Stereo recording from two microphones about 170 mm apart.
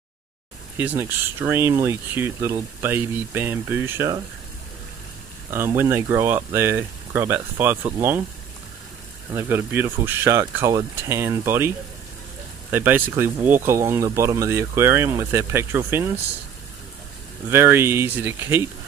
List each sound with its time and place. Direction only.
0.7 s speech: 10° right (ahead or behind)
5.5 s speech: 15° right (ahead or behind)
9.3 s speech: 15° right (ahead or behind)
12.7 s speech: 10° right (ahead or behind)
17.5 s speech: 15° right (ahead or behind)